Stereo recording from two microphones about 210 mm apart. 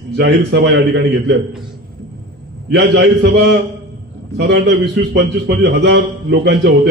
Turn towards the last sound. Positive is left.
turn(degrees=-55)  # may be behind; listen again after turning